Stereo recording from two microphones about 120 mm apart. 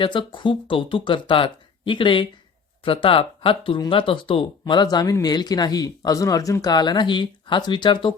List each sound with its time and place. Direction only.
0.0 s speech: 45° left (ahead or behind)